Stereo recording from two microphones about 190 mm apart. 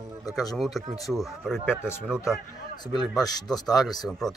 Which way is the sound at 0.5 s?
Centre (ahead or behind).